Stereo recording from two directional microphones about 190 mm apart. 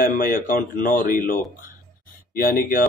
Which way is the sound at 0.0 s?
45° left (ahead or behind).